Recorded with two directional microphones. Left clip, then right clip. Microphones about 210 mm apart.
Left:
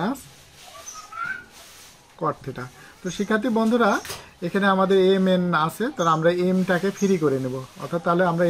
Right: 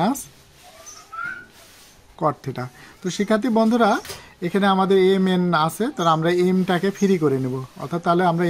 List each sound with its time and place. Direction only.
2.1 s speech: 50° right (ahead or behind)